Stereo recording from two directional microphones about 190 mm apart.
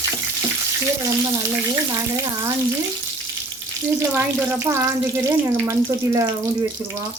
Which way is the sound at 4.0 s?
10° right (ahead or behind).